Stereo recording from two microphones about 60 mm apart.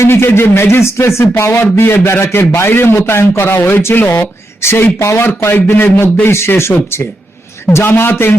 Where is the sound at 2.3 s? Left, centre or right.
Left.